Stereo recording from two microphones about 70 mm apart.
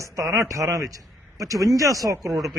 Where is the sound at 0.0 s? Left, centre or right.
Right.